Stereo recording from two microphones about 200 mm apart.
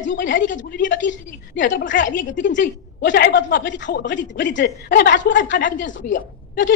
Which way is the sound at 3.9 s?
45° left (ahead or behind).